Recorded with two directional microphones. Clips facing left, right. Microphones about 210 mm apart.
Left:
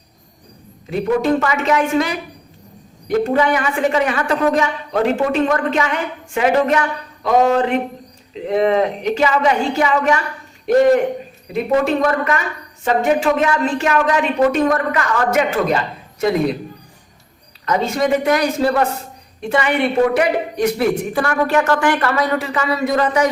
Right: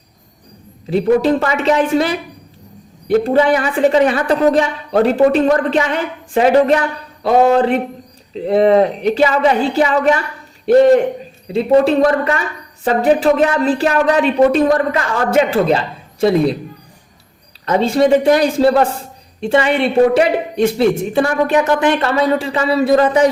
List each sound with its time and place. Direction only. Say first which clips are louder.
0.9 s a woman's voice: right 4 dB; 35° right (ahead or behind)
11.5 s a woman's voice: right 5 dB; 30° right (ahead or behind)
17.7 s speech: right 5 dB; 30° right (ahead or behind)